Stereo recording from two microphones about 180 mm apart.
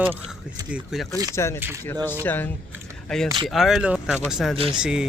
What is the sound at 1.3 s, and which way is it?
Speech, 15° left (ahead or behind).